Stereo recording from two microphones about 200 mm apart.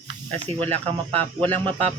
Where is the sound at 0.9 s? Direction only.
10° left (ahead or behind).